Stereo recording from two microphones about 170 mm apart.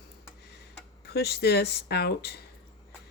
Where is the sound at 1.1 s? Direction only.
70° left (ahead or behind).